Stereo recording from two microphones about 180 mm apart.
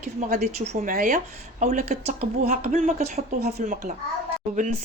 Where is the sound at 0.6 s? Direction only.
40° right (ahead or behind).